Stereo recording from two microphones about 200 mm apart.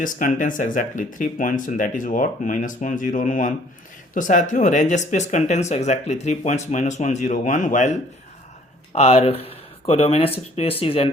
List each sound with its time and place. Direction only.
0.0 s speech: 40° left (ahead or behind)